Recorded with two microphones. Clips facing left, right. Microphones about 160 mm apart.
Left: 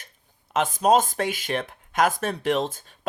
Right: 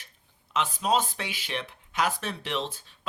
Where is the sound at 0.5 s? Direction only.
50° left (ahead or behind).